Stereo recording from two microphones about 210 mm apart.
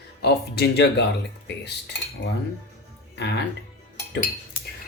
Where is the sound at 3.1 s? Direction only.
55° left (ahead or behind).